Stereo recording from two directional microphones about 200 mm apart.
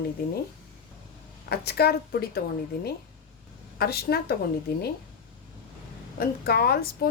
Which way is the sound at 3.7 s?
50° left (ahead or behind).